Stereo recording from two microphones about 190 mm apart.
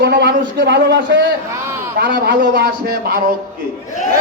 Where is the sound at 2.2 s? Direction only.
55° right (ahead or behind).